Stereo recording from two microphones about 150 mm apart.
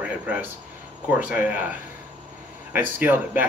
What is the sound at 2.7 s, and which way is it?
Speech, 15° right (ahead or behind).